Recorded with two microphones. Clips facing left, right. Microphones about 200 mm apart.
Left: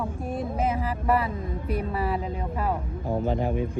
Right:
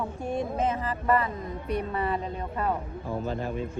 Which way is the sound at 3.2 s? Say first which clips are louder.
Left 5 dB; 15° left (ahead or behind).